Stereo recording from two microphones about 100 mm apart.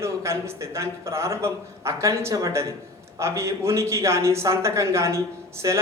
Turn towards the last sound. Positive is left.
turn(degrees=-40)  # may be behind; listen again after turning